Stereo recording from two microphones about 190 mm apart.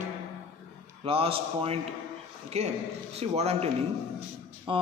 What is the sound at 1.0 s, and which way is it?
A woman's voice, 30° right (ahead or behind).